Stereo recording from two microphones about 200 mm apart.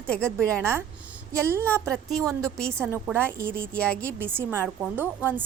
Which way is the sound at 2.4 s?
5° left (ahead or behind).